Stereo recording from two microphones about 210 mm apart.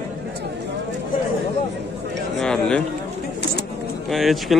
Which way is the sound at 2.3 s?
5° left (ahead or behind).